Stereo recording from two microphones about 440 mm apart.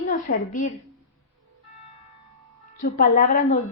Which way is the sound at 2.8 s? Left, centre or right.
Centre.